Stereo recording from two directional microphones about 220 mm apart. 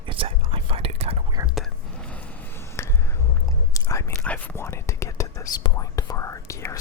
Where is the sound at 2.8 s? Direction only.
10° left (ahead or behind).